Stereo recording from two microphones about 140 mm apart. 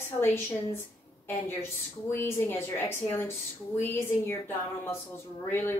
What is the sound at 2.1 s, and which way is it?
Speech, 15° left (ahead or behind).